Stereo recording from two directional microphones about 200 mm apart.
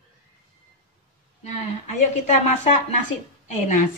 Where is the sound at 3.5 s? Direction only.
40° left (ahead or behind).